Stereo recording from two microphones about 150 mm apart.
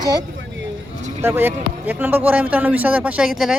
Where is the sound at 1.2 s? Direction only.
15° right (ahead or behind).